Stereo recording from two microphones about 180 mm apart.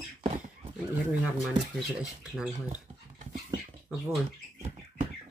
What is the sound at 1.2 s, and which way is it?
Speech, centre (ahead or behind).